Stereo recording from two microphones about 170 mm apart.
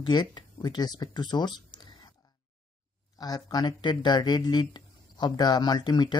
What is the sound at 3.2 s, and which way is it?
Speech, 25° left (ahead or behind).